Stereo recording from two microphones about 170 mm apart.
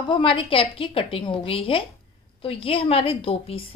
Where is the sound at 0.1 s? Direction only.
30° left (ahead or behind).